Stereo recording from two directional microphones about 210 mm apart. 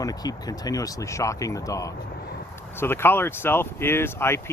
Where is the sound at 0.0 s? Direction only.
15° left (ahead or behind).